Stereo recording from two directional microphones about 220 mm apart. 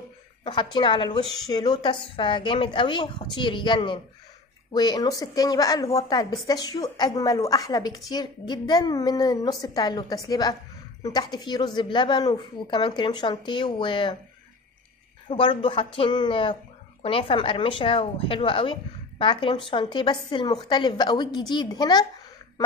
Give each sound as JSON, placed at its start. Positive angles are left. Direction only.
{"t": 0.4, "sound": "a woman's voice", "side_deg": 20}
{"t": 15.2, "sound": "speech", "side_deg": 25}